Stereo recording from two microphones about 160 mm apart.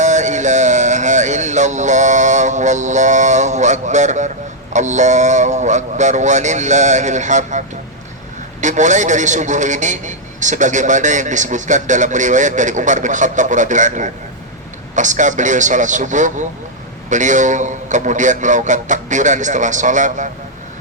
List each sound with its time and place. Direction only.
0.0 s music: 50° right (ahead or behind)
4.7 s a man's voice: 50° right (ahead or behind)
8.6 s a man's voice: 50° right (ahead or behind)